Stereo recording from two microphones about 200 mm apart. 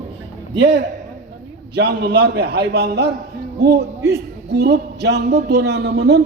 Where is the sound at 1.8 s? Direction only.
50° right (ahead or behind).